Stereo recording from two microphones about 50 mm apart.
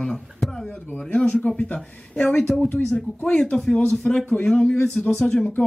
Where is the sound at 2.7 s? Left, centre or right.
Left.